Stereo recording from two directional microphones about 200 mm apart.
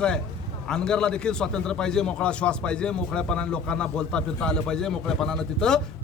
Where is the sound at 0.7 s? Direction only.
5° left (ahead or behind).